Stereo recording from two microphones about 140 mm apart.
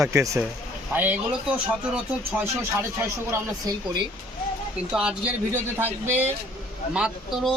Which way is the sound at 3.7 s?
25° right (ahead or behind).